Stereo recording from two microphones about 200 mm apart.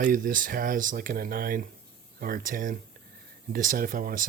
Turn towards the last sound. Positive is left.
turn(degrees=-45)  # may be behind; listen again after turning